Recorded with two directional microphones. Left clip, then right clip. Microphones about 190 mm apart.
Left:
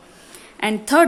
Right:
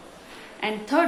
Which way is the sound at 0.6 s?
50° left (ahead or behind).